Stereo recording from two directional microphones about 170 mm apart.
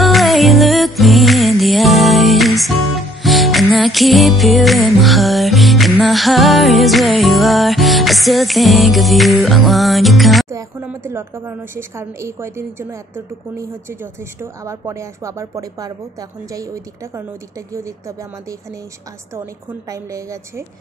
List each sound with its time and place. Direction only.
0.0 s music: centre (ahead or behind)
10.5 s a woman's voice: 10° right (ahead or behind)
19.9 s a woman's voice: 20° right (ahead or behind)